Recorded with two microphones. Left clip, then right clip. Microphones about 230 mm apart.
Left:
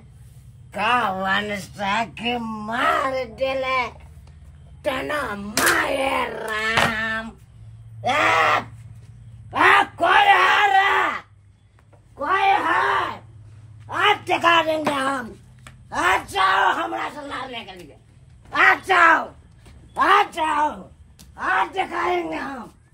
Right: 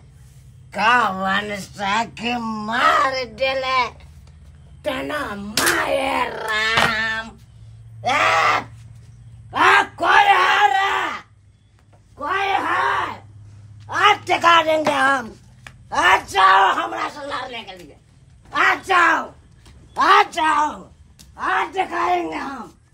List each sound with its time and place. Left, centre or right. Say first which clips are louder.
0.7 s a man's voice: right 4 dB; centre
4.8 s speech: even; centre
6.9 s a sound: right 3 dB; centre
8.0 s speech: right 1 dB; centre
9.5 s groan: right 1 dB; centre
13.8 s a sound: right 3 dB; centre
14.9 s a woman's voice: right 5 dB; right; by 22.5 s centre